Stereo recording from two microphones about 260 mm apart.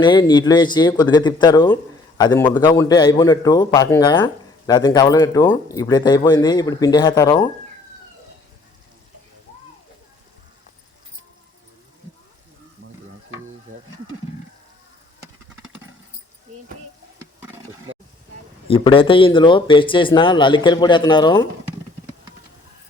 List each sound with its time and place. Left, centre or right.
0.0 s speech: centre
17.2 s a sound: centre
18.7 s speech: centre